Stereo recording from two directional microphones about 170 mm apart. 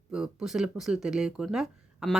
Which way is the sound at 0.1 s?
5° right (ahead or behind).